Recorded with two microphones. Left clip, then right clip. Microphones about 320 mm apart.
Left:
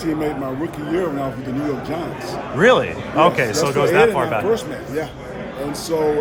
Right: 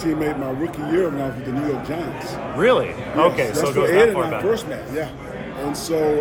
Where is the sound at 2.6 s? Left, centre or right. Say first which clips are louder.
Left 3 dB; left.